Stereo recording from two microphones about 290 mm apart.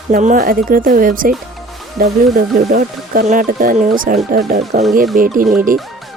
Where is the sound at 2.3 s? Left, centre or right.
Right.